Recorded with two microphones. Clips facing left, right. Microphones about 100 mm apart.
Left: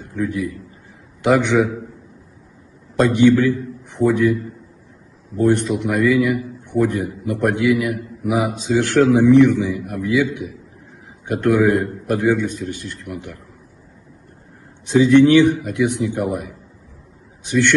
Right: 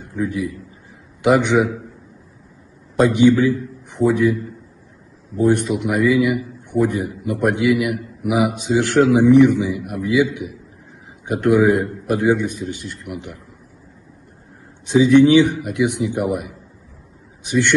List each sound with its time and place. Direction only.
0.1 s a man's voice: 15° right (ahead or behind)
3.0 s a man's voice: 15° right (ahead or behind)
5.4 s a man's voice: 15° right (ahead or behind)
14.9 s a man's voice: 15° right (ahead or behind)